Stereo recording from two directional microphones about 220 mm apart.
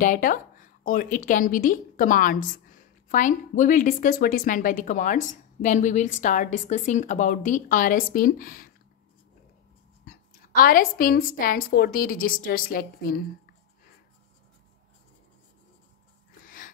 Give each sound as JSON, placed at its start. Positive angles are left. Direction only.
{"t": 0.0, "sound": "a woman's voice", "side_deg": 40}
{"t": 10.0, "sound": "a woman's voice", "side_deg": 40}
{"t": 16.4, "sound": "a sound", "side_deg": 35}